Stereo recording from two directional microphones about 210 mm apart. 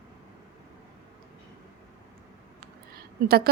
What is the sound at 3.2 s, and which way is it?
Speech, 50° right (ahead or behind).